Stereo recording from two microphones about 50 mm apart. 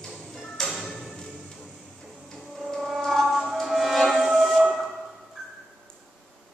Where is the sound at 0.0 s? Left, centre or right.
Centre.